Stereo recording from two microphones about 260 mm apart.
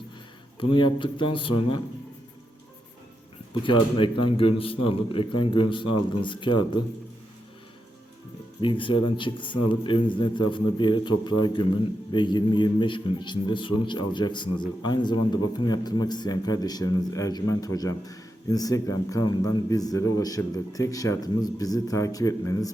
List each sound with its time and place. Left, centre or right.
0.6 s a man's voice: centre
3.6 s a man's voice: centre
8.6 s a man's voice: centre